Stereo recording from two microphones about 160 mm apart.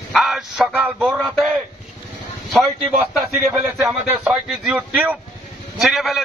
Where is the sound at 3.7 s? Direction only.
Centre (ahead or behind).